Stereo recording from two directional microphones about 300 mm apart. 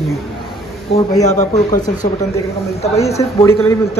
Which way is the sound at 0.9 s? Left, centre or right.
Left.